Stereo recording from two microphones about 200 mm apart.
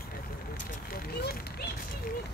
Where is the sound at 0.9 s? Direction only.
50° left (ahead or behind).